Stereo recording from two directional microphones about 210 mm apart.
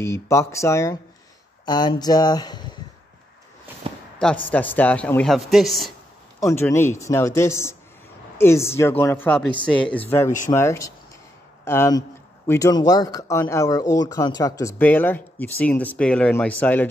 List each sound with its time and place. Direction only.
0.0 s speech: 15° left (ahead or behind)
3.9 s a sound: 25° right (ahead or behind)
4.2 s a man's voice: 5° left (ahead or behind)
6.4 s speech: 10° left (ahead or behind)